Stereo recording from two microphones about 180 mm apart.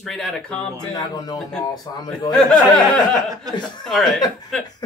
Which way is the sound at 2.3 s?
Centre (ahead or behind).